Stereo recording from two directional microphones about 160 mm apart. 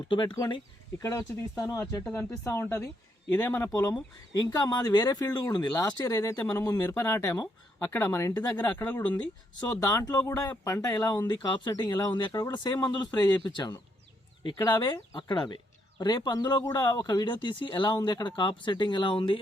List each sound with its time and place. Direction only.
0.1 s speech: 30° left (ahead or behind)
2.0 s speech: 5° left (ahead or behind)
8.5 s speech: 10° left (ahead or behind); by 19.4 s 30° left (ahead or behind)